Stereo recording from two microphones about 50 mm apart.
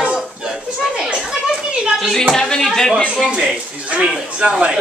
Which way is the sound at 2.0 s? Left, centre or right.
Centre.